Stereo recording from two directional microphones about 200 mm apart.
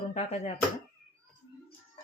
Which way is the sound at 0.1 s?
35° left (ahead or behind).